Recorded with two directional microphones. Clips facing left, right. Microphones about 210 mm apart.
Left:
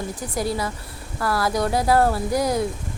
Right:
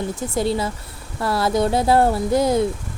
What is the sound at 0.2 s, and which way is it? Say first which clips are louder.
A woman's voice: right 3 dB; 25° right (ahead or behind).